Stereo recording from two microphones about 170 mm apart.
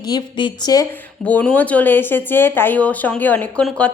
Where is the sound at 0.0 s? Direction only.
25° left (ahead or behind).